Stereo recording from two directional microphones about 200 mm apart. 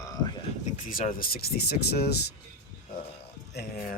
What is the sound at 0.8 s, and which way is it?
Speech, 45° left (ahead or behind).